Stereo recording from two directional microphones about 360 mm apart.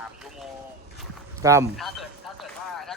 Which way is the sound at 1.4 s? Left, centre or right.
Centre.